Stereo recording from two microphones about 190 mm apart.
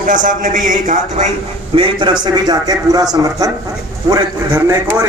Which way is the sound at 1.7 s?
25° right (ahead or behind).